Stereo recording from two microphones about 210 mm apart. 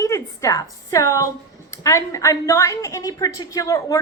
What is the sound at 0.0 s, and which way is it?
A woman's voice, 15° left (ahead or behind).